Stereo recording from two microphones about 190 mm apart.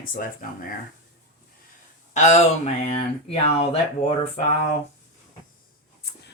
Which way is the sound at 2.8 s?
35° left (ahead or behind).